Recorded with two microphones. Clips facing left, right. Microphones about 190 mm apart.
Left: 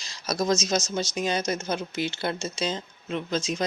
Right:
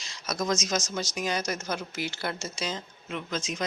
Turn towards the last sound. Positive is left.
turn(degrees=30)  # may be behind; listen again after turning